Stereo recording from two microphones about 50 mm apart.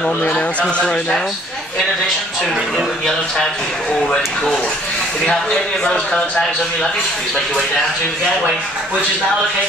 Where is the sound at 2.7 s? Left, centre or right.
Centre.